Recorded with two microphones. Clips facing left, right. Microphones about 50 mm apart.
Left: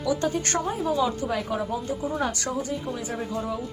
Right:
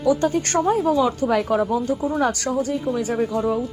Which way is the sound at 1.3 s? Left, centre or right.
Right.